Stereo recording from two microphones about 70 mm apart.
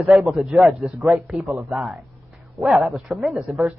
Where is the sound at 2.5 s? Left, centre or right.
Centre.